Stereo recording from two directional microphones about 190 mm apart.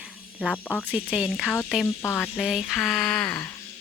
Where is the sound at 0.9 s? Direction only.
5° right (ahead or behind).